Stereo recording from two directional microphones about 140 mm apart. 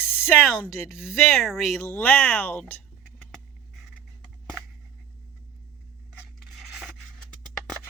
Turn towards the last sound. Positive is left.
turn(degrees=0)  # may be behind; listen again after turning